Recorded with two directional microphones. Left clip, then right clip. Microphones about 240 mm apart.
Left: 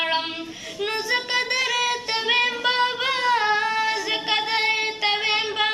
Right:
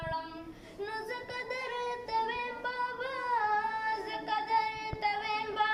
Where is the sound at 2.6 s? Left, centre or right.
Centre.